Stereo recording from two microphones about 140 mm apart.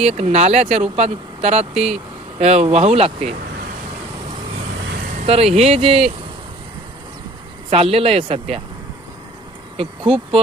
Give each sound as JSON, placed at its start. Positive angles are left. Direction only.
{"t": 0.0, "sound": "speech", "side_deg": -50}
{"t": 5.2, "sound": "speech", "side_deg": -45}
{"t": 7.7, "sound": "speech", "side_deg": -45}
{"t": 9.7, "sound": "speech", "side_deg": -40}